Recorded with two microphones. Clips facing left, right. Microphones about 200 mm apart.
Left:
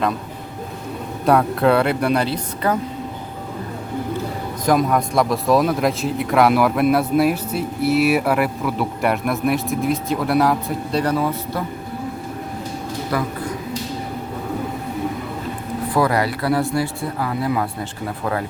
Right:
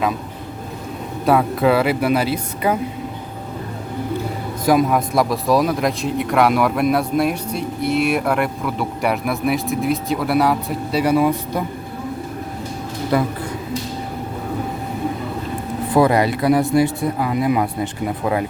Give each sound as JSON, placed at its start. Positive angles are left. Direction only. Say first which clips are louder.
{"t": 1.2, "sound": "speech", "louder": "even", "side_deg": 0}
{"t": 4.6, "sound": "speech", "louder": "right 2 dB", "side_deg": -5}
{"t": 13.1, "sound": "a man's voice", "louder": "right 5 dB", "side_deg": -25}
{"t": 16.0, "sound": "speech", "louder": "right 4 dB", "side_deg": -20}